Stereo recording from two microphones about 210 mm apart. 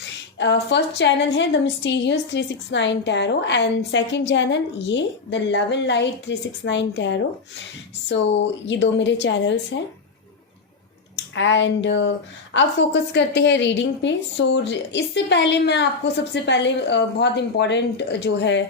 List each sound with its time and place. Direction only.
0.3 s a woman's voice: 55° left (ahead or behind)
11.3 s a woman's voice: 60° left (ahead or behind)